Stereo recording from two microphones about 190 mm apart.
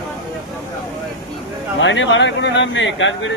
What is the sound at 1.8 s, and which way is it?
Speech, 75° left (ahead or behind).